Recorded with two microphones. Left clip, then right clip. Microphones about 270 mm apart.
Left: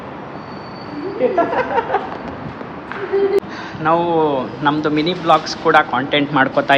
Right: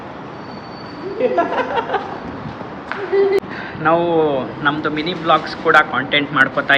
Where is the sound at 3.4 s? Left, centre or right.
Centre.